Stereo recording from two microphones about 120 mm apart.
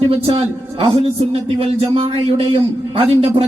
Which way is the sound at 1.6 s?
55° right (ahead or behind).